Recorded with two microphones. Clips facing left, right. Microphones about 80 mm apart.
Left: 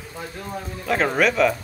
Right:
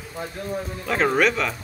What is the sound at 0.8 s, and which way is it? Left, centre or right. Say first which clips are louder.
Speech: even; centre.